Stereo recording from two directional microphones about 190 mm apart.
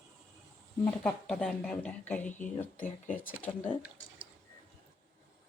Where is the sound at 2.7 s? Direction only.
40° left (ahead or behind).